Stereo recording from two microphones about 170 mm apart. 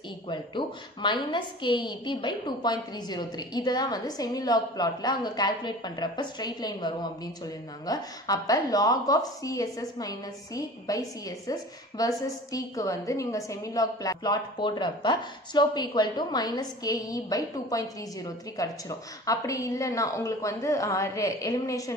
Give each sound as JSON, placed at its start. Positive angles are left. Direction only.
{"t": 0.3, "sound": "a woman's voice", "side_deg": 30}